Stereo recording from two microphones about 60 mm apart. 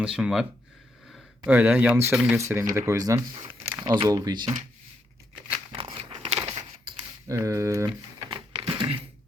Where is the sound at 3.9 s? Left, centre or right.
Right.